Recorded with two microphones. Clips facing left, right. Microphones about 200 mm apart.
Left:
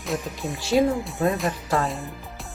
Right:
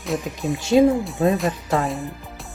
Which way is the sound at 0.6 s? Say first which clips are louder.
Right 5 dB; 20° right (ahead or behind).